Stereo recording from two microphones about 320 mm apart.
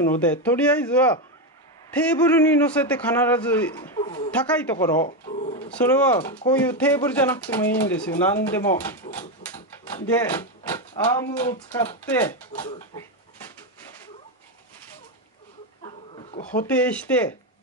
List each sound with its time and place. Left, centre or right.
0.0 s speech: centre
5.0 s pigeon: left
5.6 s speech: centre
12.6 s speech: centre
15.8 s dog: centre
16.6 s speech: centre